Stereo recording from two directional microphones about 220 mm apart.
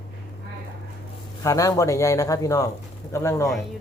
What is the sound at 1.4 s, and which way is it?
A man's voice, 15° left (ahead or behind).